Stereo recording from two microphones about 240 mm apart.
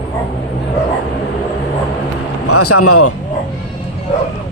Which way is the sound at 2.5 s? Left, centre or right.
Left.